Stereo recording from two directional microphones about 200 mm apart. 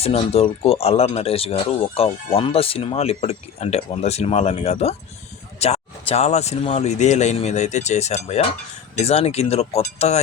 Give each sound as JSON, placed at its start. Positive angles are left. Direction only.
{"t": 0.0, "sound": "speech", "side_deg": 30}